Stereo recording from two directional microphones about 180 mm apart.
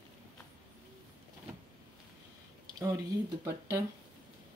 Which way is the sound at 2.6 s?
15° right (ahead or behind).